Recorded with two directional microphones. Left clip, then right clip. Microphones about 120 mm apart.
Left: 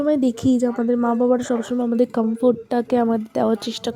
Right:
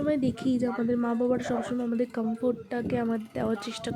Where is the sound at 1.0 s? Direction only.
35° left (ahead or behind).